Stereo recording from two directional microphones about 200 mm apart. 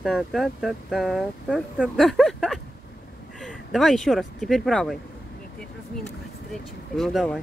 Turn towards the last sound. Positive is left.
turn(degrees=0)  # may be behind; listen again after turning